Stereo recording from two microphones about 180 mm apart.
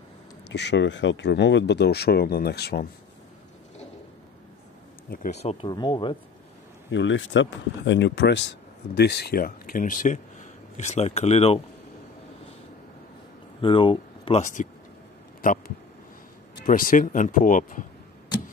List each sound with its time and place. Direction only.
0.5 s speech: 75° left (ahead or behind)
5.1 s speech: 45° left (ahead or behind); by 6.1 s 25° left (ahead or behind)
6.9 s speech: 90° left; by 11.6 s 35° left (ahead or behind)
13.6 s speech: 30° left (ahead or behind)
14.4 s speech: 45° left (ahead or behind)
16.6 s speech: 50° left (ahead or behind)